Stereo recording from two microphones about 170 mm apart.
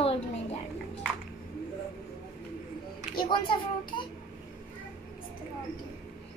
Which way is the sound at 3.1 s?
25° left (ahead or behind).